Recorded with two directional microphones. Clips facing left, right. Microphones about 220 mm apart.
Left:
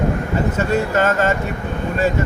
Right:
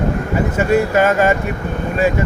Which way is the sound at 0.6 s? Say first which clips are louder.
Right 5 dB; 10° right (ahead or behind).